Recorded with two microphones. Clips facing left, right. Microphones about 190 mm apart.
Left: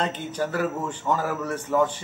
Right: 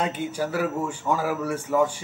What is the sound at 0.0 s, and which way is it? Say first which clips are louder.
A man's voice: right 1 dB; 10° right (ahead or behind).